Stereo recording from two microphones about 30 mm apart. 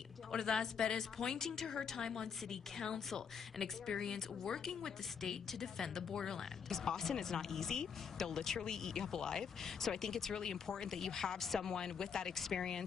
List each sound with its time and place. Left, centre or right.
0.3 s speech: centre
12.4 s speech: centre